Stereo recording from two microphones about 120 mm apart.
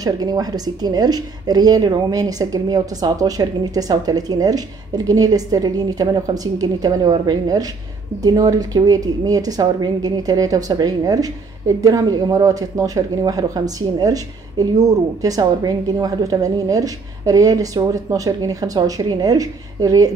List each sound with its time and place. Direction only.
0.0 s a woman's voice: 35° right (ahead or behind)